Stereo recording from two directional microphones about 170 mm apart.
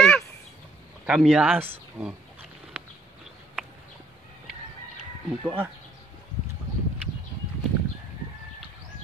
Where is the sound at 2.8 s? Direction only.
10° right (ahead or behind).